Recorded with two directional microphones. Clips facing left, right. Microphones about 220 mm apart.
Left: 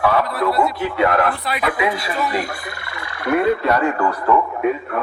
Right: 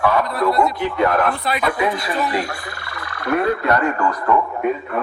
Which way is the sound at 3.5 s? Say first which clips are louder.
Left 1 dB; 5° left (ahead or behind).